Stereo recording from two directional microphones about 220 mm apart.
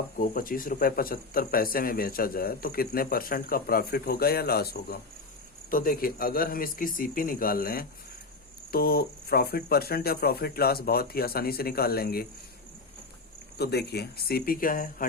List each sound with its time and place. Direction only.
0.2 s speech: 40° left (ahead or behind)
13.6 s speech: 45° left (ahead or behind)